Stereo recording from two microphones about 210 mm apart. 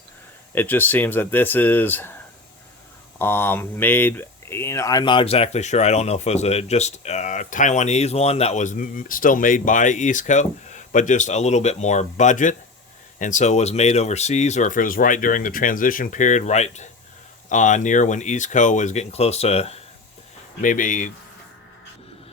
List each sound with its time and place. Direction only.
0.5 s speech: 10° left (ahead or behind)
3.2 s speech: 10° left (ahead or behind); by 21.1 s 40° left (ahead or behind)